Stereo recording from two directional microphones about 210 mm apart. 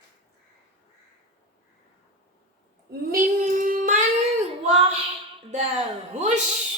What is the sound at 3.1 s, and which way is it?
Child singing, 40° right (ahead or behind).